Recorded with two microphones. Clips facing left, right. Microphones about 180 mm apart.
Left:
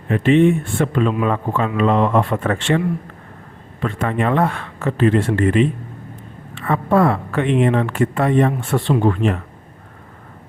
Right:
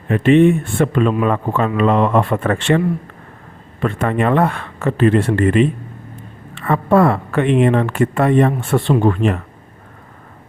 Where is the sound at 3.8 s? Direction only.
55° right (ahead or behind).